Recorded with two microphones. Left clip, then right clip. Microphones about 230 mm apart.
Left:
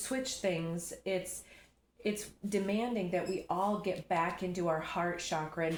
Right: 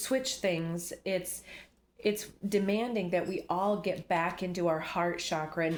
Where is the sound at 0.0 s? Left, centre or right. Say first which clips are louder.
Right 4 dB; right.